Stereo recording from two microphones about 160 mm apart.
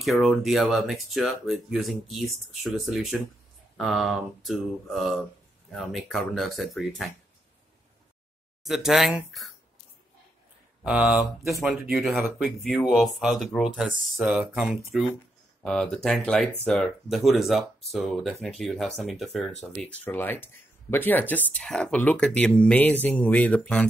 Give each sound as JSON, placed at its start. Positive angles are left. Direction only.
{"t": 0.0, "sound": "speech", "side_deg": 0}
{"t": 8.6, "sound": "speech", "side_deg": 0}
{"t": 10.8, "sound": "speech", "side_deg": -5}